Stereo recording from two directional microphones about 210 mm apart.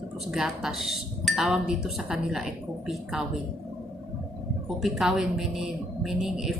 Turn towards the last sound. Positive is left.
turn(degrees=0)  # may be behind; listen again after turning